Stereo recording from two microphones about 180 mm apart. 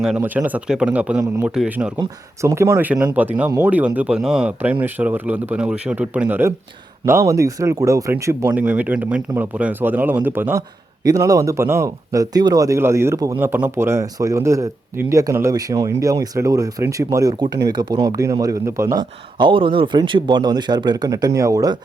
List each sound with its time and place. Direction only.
0.0 s speech: 5° right (ahead or behind)